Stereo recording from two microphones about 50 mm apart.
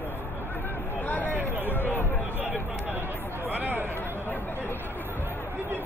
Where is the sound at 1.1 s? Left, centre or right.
Left.